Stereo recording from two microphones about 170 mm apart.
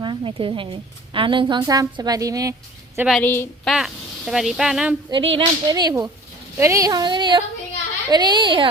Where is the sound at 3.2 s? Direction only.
10° left (ahead or behind).